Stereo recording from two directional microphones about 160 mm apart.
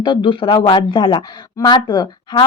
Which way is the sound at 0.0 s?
30° left (ahead or behind).